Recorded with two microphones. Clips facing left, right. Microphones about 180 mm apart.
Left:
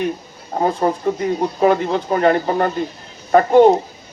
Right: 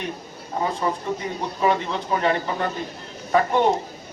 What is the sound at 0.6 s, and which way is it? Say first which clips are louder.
Speech: left 8 dB; 40° left (ahead or behind).